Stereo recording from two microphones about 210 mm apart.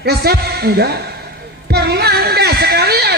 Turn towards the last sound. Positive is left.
turn(degrees=-50)  # may be behind; listen again after turning